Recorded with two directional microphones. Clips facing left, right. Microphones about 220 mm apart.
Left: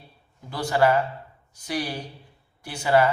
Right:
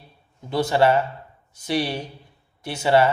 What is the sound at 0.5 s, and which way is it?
A man's voice, 25° right (ahead or behind).